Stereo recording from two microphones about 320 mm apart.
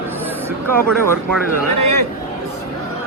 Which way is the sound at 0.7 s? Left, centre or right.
Centre.